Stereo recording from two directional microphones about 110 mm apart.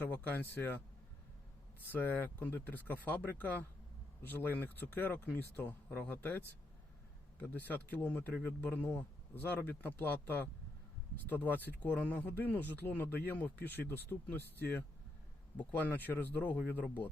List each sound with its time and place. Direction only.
0.0 s speech: 15° left (ahead or behind)
1.9 s speech: 15° left (ahead or behind)